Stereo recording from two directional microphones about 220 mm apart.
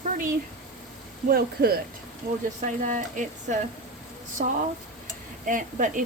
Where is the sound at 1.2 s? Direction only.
45° right (ahead or behind).